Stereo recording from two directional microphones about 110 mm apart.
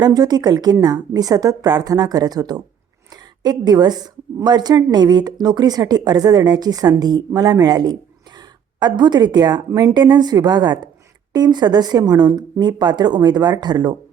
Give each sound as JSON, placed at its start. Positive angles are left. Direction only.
{"t": 0.0, "sound": "a woman's voice", "side_deg": -35}